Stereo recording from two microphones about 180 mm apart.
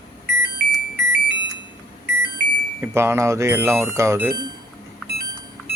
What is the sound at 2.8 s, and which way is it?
Speech, 15° right (ahead or behind).